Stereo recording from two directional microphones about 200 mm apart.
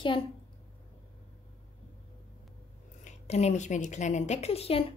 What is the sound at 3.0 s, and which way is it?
A woman's voice, 35° left (ahead or behind).